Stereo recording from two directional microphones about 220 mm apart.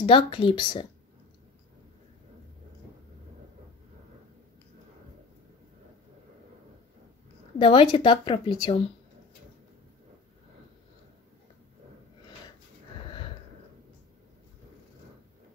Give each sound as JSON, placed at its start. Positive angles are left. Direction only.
{"t": 0.0, "sound": "a woman's voice", "side_deg": 25}
{"t": 7.5, "sound": "a woman's voice", "side_deg": 25}